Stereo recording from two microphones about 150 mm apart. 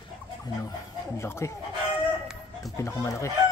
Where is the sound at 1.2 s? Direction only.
20° left (ahead or behind).